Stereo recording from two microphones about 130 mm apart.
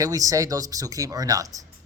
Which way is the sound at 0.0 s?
25° right (ahead or behind).